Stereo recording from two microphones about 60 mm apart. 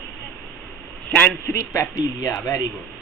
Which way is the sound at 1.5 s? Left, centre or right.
Left.